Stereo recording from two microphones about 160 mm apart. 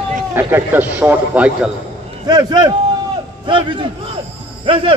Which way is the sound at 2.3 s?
25° right (ahead or behind).